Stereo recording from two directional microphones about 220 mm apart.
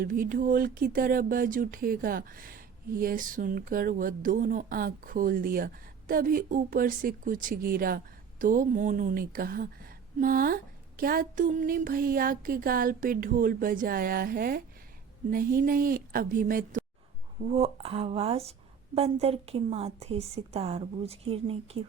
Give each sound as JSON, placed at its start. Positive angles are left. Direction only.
{"t": 0.0, "sound": "speech", "side_deg": -40}
{"t": 17.4, "sound": "a woman's voice", "side_deg": -25}